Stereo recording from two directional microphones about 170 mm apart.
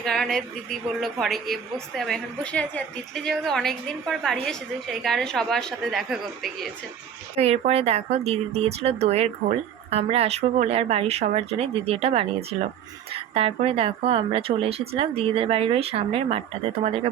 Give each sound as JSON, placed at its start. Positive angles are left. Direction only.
{"t": 0.0, "sound": "a woman's voice", "side_deg": 5}
{"t": 7.3, "sound": "speech", "side_deg": -35}